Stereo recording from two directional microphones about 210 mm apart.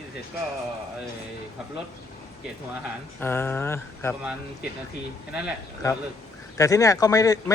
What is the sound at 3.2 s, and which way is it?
Speech, 10° left (ahead or behind).